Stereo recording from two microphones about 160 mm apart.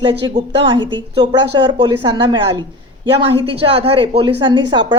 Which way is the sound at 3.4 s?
35° right (ahead or behind).